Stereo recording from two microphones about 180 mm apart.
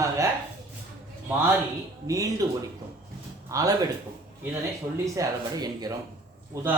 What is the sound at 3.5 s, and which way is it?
Speech, 20° right (ahead or behind).